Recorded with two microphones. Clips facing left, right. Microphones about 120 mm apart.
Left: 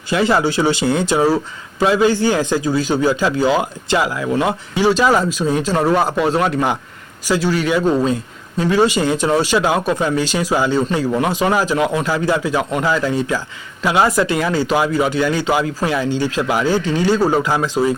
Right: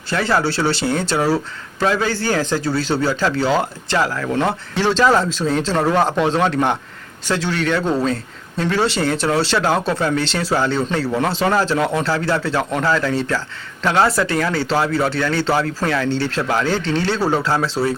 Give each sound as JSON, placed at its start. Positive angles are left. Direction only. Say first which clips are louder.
{"t": 0.1, "sound": "speech", "louder": "left 3 dB", "side_deg": 15}